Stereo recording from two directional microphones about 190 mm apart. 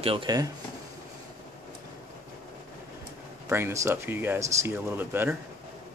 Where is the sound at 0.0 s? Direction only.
25° right (ahead or behind).